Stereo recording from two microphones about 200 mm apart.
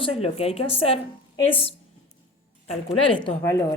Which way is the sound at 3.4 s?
15° left (ahead or behind).